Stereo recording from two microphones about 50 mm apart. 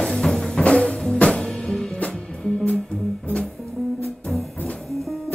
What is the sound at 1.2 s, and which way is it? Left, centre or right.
Music, left.